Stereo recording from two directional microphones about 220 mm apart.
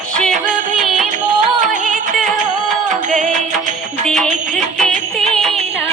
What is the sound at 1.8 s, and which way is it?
Music, 35° right (ahead or behind).